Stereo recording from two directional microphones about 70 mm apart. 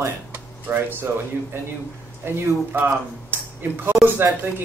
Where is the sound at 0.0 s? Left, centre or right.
Right.